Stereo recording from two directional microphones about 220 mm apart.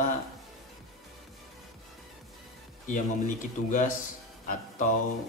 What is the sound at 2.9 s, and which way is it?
Speech, 35° left (ahead or behind).